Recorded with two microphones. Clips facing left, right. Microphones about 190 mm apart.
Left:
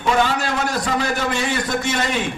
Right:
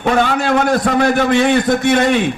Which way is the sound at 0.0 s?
55° right (ahead or behind).